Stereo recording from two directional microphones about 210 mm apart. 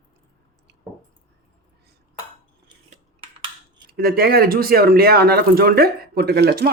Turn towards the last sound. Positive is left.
turn(degrees=-50)  # may be behind; listen again after turning